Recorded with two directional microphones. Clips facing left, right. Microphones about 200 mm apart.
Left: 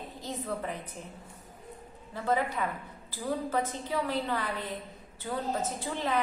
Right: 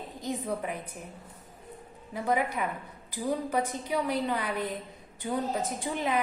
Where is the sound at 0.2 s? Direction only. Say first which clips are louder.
Right 3 dB; 15° right (ahead or behind).